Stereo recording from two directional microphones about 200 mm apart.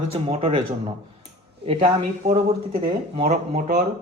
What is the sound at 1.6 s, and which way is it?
Speech, 30° right (ahead or behind).